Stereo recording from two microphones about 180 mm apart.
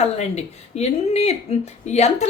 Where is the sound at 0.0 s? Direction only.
35° left (ahead or behind).